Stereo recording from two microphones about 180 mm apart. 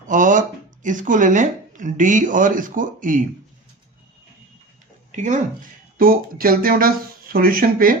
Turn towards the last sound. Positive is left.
turn(degrees=-55)  # may be behind; listen again after turning